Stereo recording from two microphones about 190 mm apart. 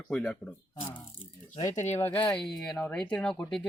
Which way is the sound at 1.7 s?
35° left (ahead or behind).